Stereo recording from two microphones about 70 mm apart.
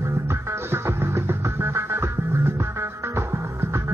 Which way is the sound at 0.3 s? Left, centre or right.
Right.